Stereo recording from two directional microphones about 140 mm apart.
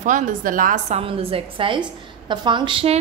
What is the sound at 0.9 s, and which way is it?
A woman's voice, 45° right (ahead or behind).